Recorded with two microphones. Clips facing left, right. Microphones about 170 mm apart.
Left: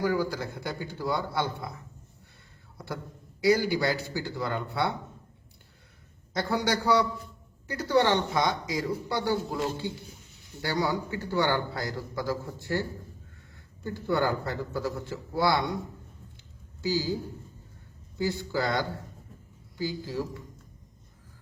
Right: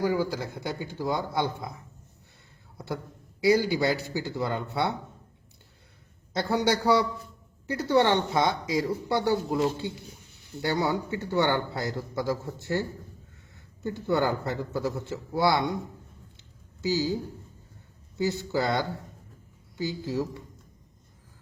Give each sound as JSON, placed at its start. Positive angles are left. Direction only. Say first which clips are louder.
{"t": 0.0, "sound": "a man's voice", "louder": "right 1 dB", "side_deg": -20}
{"t": 2.7, "sound": "a man's voice", "louder": "right 3 dB", "side_deg": -20}
{"t": 6.3, "sound": "a man's voice", "louder": "right 2 dB", "side_deg": -20}
{"t": 13.8, "sound": "a man's voice", "louder": "right 1 dB", "side_deg": -20}
{"t": 16.8, "sound": "a man's voice", "louder": "right 2 dB", "side_deg": -20}
{"t": 18.2, "sound": "a man's voice", "louder": "right 2 dB", "side_deg": -20}